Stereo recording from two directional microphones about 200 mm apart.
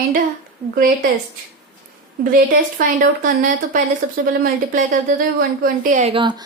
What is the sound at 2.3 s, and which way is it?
A woman's voice, 40° right (ahead or behind).